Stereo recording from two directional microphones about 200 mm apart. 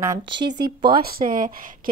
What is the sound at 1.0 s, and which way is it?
Speech, 45° right (ahead or behind).